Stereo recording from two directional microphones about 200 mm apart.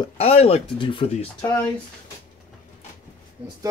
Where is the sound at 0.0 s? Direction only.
30° left (ahead or behind).